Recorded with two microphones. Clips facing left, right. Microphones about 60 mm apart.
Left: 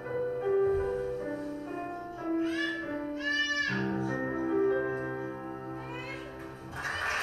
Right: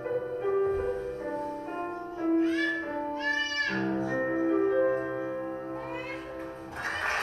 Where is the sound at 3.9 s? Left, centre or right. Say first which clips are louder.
Right 3 dB; right.